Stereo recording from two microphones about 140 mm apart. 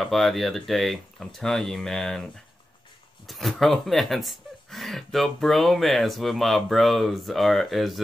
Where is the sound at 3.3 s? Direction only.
Centre (ahead or behind).